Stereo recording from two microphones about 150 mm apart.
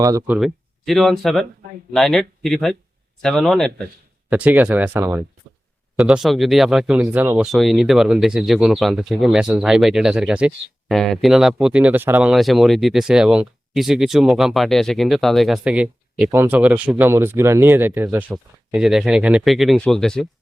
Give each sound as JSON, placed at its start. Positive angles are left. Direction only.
{"t": 0.0, "sound": "speech", "side_deg": -25}
{"t": 0.3, "sound": "speech", "side_deg": 0}
{"t": 4.3, "sound": "speech", "side_deg": -10}
{"t": 6.0, "sound": "speech", "side_deg": 0}